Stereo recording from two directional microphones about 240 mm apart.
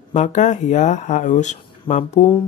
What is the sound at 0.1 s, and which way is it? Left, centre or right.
Speech, left.